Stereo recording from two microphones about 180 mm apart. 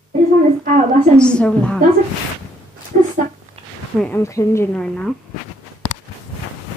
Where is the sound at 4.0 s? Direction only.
10° left (ahead or behind).